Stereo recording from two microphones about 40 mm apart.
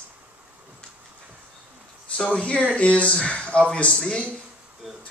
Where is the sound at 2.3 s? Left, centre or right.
Left.